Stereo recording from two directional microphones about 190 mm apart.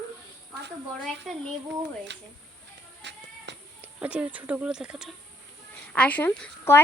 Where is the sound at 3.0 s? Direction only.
65° right (ahead or behind).